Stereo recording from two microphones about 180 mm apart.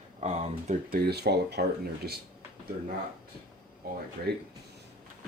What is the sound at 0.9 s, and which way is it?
Speech, 60° right (ahead or behind).